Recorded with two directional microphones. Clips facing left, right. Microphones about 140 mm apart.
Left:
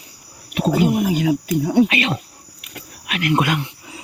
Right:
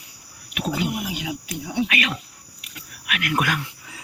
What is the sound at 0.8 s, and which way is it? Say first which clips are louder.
Speech: left 10 dB; 45° left (ahead or behind).